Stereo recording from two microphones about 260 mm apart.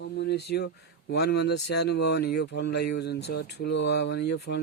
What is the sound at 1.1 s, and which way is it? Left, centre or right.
Speech, left.